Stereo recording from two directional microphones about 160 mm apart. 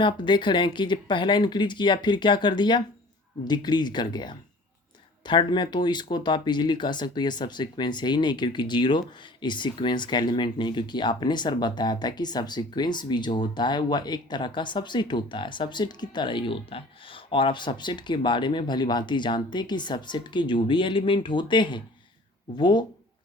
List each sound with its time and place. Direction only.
0.0 s speech: 30° left (ahead or behind)